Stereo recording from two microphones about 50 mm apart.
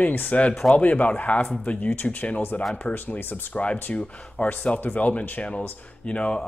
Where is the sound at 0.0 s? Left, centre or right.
Left.